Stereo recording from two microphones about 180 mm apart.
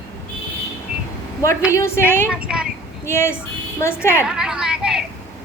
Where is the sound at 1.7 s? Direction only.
15° left (ahead or behind).